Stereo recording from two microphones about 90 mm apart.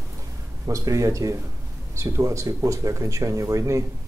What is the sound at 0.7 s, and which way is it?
Speech, 35° right (ahead or behind).